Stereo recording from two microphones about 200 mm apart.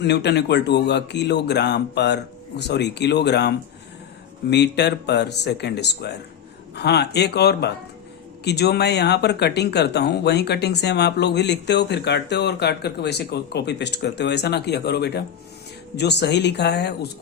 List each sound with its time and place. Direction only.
0.0 s speech: 60° left (ahead or behind)